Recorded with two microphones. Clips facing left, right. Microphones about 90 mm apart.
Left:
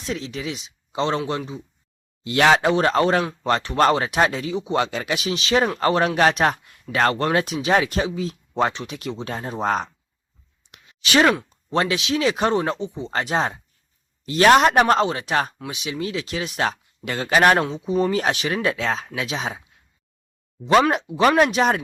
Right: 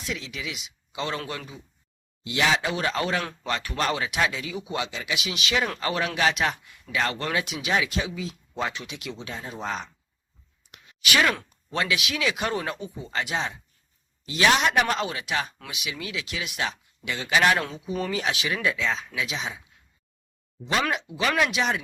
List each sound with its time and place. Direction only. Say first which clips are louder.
0.0 s speech: left 5 dB; 35° left (ahead or behind)
2.6 s speech: left 9 dB; 40° left (ahead or behind)
4.8 s speech: left 7 dB; 45° left (ahead or behind)
10.7 s a sound: left 4 dB; 35° left (ahead or behind)
11.4 s speech: left 6 dB; 35° left (ahead or behind)
13.1 s speech: left 6 dB; 40° left (ahead or behind)
17.7 s speech: left 8 dB; 30° left (ahead or behind)
20.9 s speech: left 8 dB; 45° left (ahead or behind)